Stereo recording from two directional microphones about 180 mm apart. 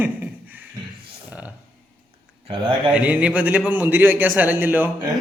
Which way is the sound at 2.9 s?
5° right (ahead or behind).